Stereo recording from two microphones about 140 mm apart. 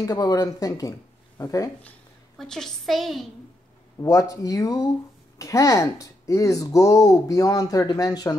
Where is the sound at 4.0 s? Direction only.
25° left (ahead or behind).